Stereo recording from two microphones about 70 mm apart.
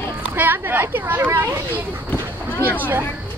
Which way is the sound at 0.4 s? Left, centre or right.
Right.